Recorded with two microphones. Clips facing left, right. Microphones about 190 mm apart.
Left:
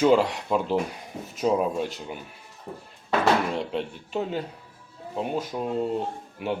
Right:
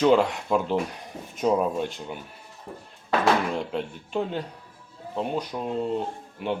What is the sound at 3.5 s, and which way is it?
Speech, centre (ahead or behind).